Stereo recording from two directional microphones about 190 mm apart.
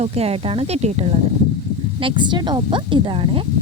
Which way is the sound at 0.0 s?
35° right (ahead or behind).